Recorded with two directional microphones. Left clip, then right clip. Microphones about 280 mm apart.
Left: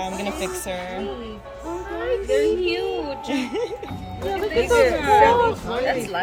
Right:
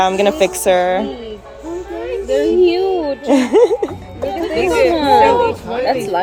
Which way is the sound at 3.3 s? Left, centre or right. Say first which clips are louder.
Right 17 dB; centre.